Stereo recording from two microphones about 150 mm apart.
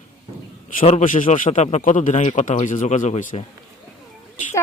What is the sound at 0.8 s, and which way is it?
Speech, 55° left (ahead or behind).